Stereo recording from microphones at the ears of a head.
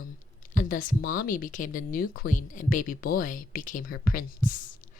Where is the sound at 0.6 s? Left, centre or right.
Left.